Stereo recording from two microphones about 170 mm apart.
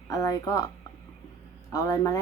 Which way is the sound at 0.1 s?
20° left (ahead or behind).